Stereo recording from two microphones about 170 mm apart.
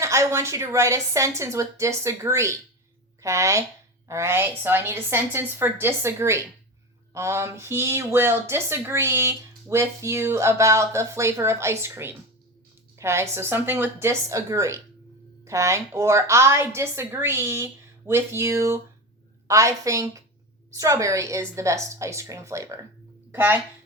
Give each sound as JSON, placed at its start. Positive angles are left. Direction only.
{"t": 0.0, "sound": "a woman's voice", "side_deg": -15}